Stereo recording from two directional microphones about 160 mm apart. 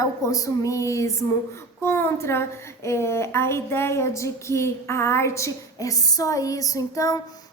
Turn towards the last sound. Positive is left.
turn(degrees=20)  # may be behind; listen again after turning